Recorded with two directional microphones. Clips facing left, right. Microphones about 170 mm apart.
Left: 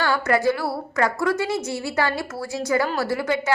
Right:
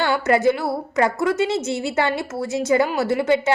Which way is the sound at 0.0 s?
25° right (ahead or behind).